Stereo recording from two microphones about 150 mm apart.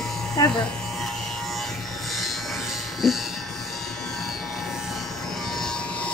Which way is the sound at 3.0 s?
Centre (ahead or behind).